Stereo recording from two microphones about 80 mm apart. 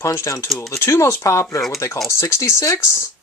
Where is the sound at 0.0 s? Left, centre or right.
Left.